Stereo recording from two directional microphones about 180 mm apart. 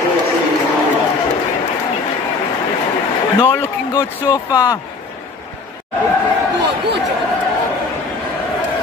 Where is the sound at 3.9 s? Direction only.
20° left (ahead or behind).